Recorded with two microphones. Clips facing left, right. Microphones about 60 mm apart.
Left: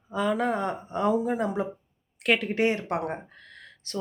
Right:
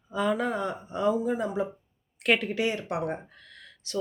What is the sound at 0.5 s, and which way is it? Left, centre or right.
Speech, left.